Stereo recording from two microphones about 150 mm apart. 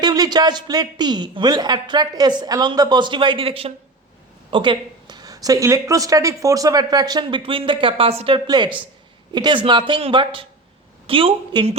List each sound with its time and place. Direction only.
0.0 s a woman's voice: 25° right (ahead or behind)